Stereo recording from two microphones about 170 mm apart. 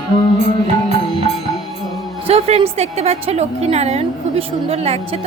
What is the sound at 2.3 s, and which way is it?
A woman's voice, 35° right (ahead or behind).